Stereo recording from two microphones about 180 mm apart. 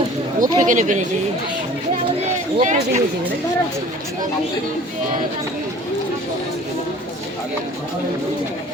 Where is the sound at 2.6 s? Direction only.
40° right (ahead or behind).